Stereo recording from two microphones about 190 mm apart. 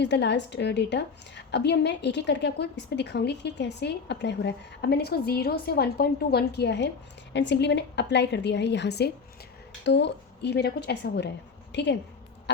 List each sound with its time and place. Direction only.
0.0 s a woman's voice: 65° left (ahead or behind)